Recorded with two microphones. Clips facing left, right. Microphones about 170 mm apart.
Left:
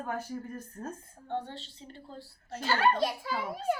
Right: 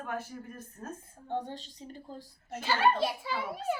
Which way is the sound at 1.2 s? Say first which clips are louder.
Right 1 dB; 15° right (ahead or behind).